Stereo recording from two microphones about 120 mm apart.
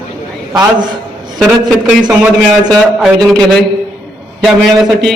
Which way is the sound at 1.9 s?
10° right (ahead or behind).